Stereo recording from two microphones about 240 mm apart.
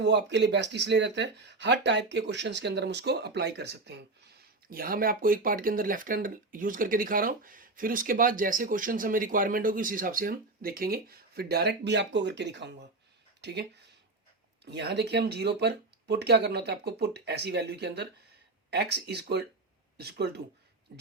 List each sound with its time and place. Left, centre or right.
0.0 s speech: right